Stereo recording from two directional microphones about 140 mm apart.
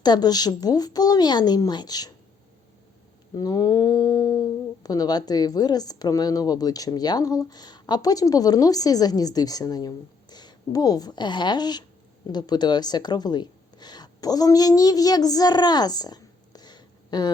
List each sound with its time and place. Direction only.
0.0 s speech: 30° left (ahead or behind)
3.3 s speech: 25° left (ahead or behind)